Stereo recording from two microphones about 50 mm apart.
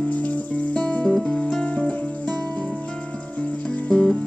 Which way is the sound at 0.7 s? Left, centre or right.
Centre.